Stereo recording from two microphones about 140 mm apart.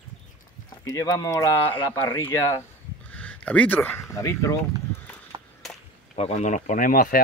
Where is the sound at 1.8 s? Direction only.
35° left (ahead or behind).